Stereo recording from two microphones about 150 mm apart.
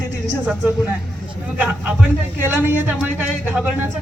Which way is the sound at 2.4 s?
10° right (ahead or behind).